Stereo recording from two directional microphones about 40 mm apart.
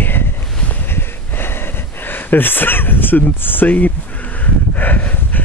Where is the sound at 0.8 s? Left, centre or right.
Left.